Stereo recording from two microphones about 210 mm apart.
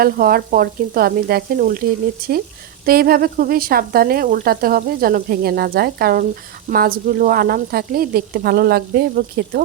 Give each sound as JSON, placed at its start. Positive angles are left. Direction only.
{"t": 0.0, "sound": "speech", "side_deg": -45}
{"t": 2.8, "sound": "speech", "side_deg": -45}